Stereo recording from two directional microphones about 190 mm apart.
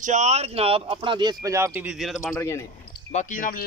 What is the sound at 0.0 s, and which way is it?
Speech, 40° right (ahead or behind).